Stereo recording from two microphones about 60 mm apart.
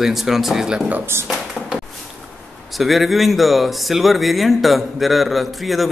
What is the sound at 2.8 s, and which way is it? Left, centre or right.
Speech, centre.